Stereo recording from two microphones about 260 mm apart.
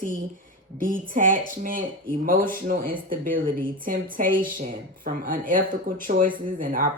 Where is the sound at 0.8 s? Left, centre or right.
Right.